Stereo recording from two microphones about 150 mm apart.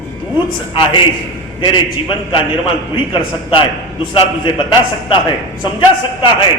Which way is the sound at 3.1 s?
35° left (ahead or behind).